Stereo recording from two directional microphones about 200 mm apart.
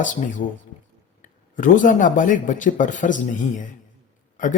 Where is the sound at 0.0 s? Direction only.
40° left (ahead or behind).